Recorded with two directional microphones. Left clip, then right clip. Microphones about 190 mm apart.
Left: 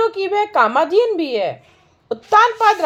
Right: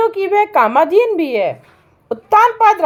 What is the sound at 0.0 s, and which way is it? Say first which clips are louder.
Speech: right 4 dB; 20° right (ahead or behind).